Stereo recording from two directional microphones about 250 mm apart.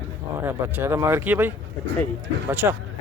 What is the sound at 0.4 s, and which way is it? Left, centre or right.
Speech, centre.